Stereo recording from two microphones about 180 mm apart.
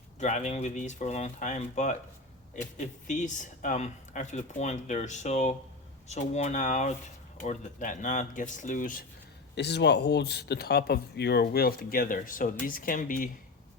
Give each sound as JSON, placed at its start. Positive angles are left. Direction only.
{"t": 0.2, "sound": "speech", "side_deg": 40}
{"t": 9.6, "sound": "speech", "side_deg": 70}